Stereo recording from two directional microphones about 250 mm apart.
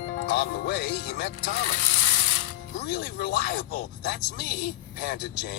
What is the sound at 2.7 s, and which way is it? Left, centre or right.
Speech, left.